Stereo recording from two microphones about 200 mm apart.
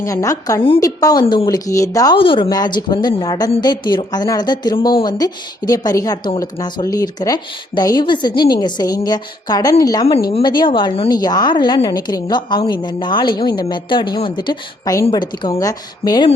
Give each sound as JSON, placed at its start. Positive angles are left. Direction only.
{"t": 0.0, "sound": "a woman's voice", "side_deg": 15}